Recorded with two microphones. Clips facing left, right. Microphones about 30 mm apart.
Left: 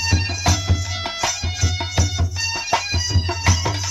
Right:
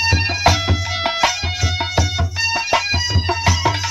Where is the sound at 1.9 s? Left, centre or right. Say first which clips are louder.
Right 4 dB; right.